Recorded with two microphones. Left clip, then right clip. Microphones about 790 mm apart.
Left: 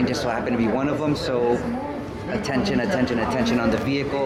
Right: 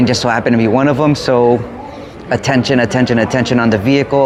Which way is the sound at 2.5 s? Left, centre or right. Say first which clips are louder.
Right 9 dB; right.